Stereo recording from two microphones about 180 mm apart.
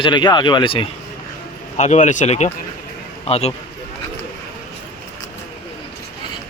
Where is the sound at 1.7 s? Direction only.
40° left (ahead or behind).